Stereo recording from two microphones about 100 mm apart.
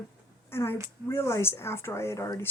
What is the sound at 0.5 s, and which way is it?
Speech, 25° left (ahead or behind).